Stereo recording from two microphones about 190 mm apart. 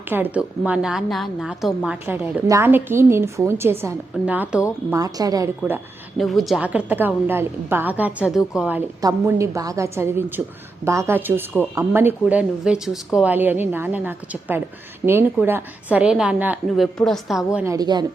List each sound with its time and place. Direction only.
0.1 s a woman's voice: 10° right (ahead or behind)
6.1 s a woman's voice: centre (ahead or behind)
9.0 s a woman's voice: 15° right (ahead or behind)